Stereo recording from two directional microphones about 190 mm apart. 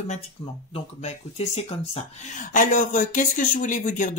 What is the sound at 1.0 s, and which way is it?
Speech, 35° left (ahead or behind).